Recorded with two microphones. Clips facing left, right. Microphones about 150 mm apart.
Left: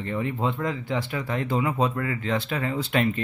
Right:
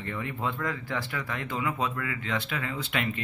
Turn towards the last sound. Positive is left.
turn(degrees=35)  # may be behind; listen again after turning